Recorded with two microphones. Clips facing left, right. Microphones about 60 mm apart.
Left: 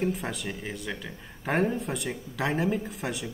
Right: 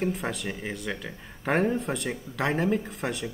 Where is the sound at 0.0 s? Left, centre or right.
Centre.